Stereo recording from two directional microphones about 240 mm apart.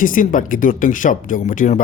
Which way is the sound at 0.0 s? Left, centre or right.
Left.